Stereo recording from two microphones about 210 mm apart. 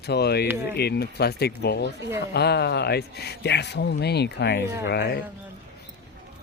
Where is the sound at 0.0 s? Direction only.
50° left (ahead or behind).